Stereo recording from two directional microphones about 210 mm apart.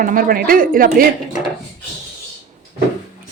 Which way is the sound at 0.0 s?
40° right (ahead or behind).